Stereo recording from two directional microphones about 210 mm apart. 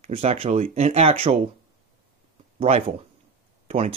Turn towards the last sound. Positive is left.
turn(degrees=-30)  # may be behind; listen again after turning